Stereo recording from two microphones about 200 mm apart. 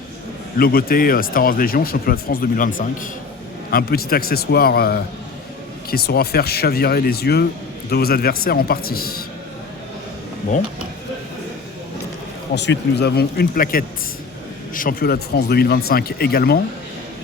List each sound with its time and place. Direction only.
0.6 s speech: 50° left (ahead or behind)
12.5 s speech: 60° left (ahead or behind)